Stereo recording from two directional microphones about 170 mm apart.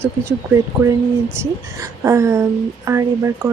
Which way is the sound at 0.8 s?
15° right (ahead or behind).